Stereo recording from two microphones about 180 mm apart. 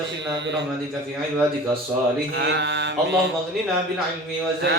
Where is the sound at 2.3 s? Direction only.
75° right (ahead or behind).